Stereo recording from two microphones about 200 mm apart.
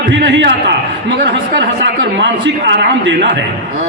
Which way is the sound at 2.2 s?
60° right (ahead or behind).